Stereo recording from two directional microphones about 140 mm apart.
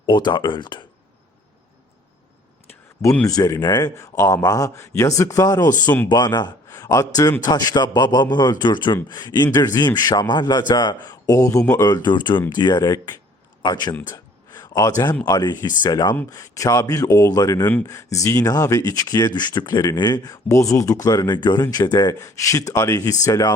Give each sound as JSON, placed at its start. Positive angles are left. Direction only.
{"t": 0.0, "sound": "speech", "side_deg": 30}
{"t": 3.2, "sound": "speech", "side_deg": 25}
{"t": 14.1, "sound": "a sound", "side_deg": 30}
{"t": 15.2, "sound": "speech", "side_deg": 30}